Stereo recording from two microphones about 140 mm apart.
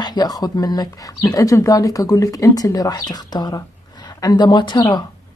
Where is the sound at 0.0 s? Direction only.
30° left (ahead or behind).